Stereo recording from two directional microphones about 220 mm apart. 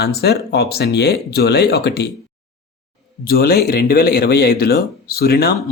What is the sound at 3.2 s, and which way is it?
Speech, 45° left (ahead or behind).